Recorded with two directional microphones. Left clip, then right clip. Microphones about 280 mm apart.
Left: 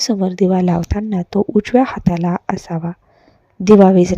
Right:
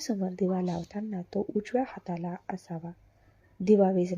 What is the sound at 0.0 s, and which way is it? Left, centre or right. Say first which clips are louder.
Speech: left 15 dB; left.